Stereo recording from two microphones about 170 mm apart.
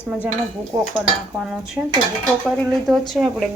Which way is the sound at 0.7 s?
25° right (ahead or behind).